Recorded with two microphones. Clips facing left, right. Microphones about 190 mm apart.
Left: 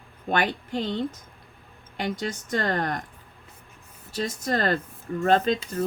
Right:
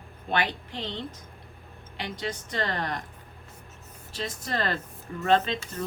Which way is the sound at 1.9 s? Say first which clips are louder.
Left 4 dB; 45° left (ahead or behind).